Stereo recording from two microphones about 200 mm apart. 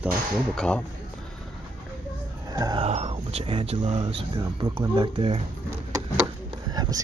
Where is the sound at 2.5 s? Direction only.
20° right (ahead or behind).